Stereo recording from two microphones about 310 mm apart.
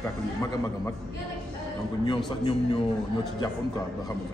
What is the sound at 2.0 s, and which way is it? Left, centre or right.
Speech, centre.